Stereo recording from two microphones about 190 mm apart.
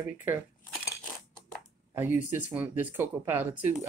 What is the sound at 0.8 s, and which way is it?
Crushing, 15° left (ahead or behind).